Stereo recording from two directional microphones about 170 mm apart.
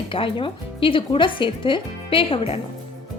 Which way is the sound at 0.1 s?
30° left (ahead or behind).